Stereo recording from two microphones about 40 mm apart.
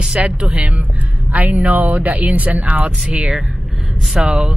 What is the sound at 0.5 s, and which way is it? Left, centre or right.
A woman's voice, right.